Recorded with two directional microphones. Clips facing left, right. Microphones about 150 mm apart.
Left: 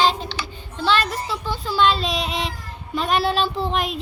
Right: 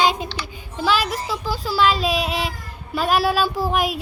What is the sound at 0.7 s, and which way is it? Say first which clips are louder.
Speech: even; 10° right (ahead or behind).